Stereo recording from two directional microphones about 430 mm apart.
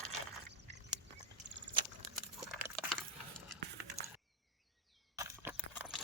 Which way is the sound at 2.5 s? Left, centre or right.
Centre.